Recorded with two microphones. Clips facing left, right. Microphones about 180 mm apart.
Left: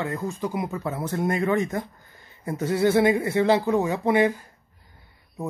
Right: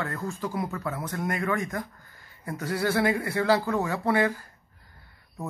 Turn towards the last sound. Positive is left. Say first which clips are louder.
# left 4 dB
turn(degrees=20)  # may be behind; listen again after turning